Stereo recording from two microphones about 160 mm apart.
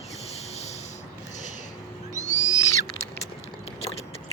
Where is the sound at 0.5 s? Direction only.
45° left (ahead or behind).